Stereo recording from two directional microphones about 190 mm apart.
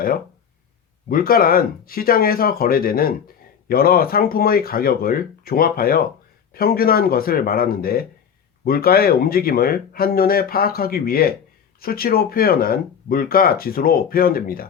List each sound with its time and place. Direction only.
1.0 s speech: 50° left (ahead or behind)